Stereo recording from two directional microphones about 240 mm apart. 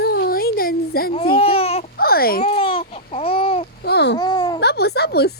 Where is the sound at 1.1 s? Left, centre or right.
Left.